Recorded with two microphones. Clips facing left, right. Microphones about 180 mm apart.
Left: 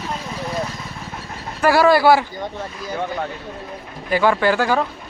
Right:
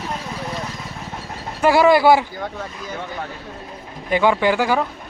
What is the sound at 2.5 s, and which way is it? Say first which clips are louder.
Speech: left 1 dB; 5° left (ahead or behind).